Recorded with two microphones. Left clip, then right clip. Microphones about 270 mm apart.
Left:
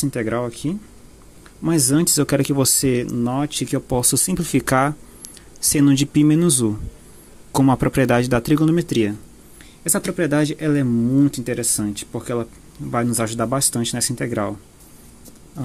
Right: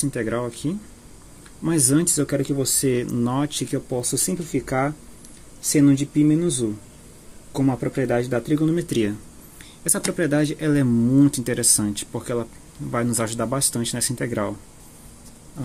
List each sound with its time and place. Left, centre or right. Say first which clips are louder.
0.0 s speech: left 2 dB; centre
4.0 s speech: left 4 dB; left
7.8 s speech: left 5 dB; left; by 14.5 s centre